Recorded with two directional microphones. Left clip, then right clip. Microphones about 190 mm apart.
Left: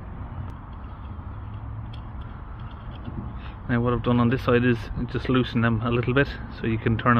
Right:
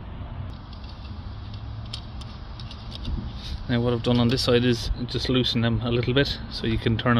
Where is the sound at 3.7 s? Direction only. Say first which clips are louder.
Even; 20° right (ahead or behind).